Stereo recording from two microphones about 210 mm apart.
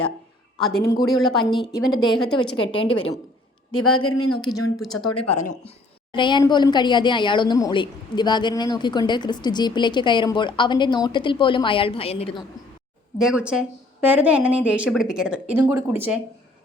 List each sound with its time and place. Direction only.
0.9 s a woman's voice: 20° left (ahead or behind)
3.8 s speech: 85° left
4.4 s a woman's voice: 20° left (ahead or behind)
5.4 s speech: 35° left (ahead or behind)
6.1 s a woman's voice: 20° left (ahead or behind)
13.1 s a woman's voice: 5° right (ahead or behind)